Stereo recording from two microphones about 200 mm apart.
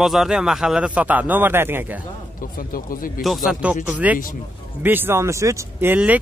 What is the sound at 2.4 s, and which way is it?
Speech, 45° left (ahead or behind).